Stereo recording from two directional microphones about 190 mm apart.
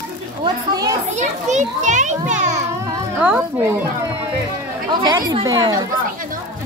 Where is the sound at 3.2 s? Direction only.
5° right (ahead or behind).